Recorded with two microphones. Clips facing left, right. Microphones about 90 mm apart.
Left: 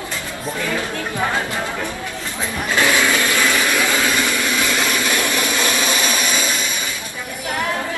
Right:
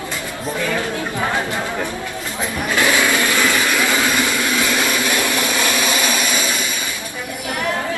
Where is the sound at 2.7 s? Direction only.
15° right (ahead or behind).